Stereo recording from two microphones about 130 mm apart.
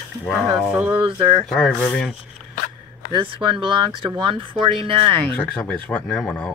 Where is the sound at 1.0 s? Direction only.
40° right (ahead or behind).